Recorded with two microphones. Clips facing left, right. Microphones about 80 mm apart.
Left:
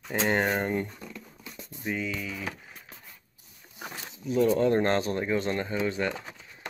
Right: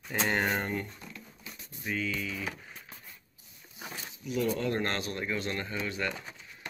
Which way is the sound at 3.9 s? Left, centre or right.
Left.